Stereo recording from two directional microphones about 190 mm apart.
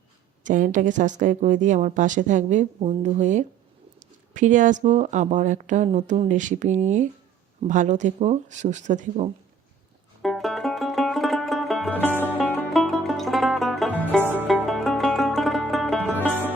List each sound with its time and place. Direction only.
0.4 s speech: 40° right (ahead or behind)
10.2 s music: centre (ahead or behind)
14.2 s music: 10° right (ahead or behind)
14.4 s music: centre (ahead or behind)